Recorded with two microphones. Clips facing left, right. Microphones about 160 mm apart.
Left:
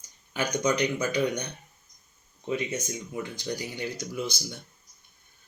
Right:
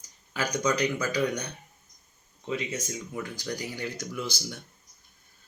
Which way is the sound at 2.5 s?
25° left (ahead or behind).